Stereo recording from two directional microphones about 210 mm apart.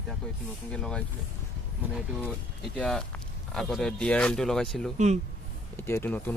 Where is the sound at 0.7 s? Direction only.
5° left (ahead or behind).